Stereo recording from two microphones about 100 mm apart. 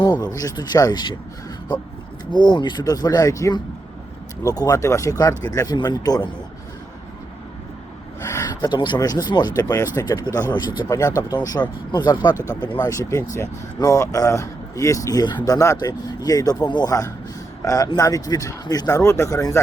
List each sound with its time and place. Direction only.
0.0 s speech: 45° left (ahead or behind)
2.3 s speech: 50° left (ahead or behind)
4.5 s speech: 40° left (ahead or behind)
8.4 s a sound: 40° left (ahead or behind)
8.7 s speech: 50° left (ahead or behind)
12.8 s speech: 35° left (ahead or behind)